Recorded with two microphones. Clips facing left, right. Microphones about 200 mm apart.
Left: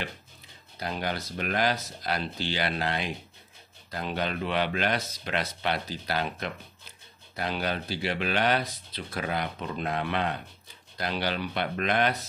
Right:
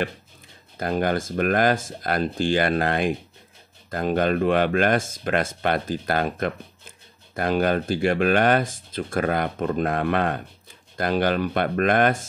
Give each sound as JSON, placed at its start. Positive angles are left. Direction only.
{"t": 0.7, "sound": "speech", "side_deg": -50}